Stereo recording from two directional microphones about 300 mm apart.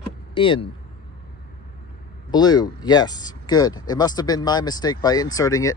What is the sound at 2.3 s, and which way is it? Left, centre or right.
Speech, centre.